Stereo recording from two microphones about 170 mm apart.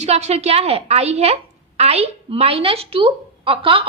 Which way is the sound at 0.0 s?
40° right (ahead or behind).